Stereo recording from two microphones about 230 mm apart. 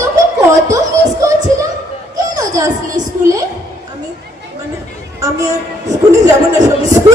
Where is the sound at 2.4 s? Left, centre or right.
Centre.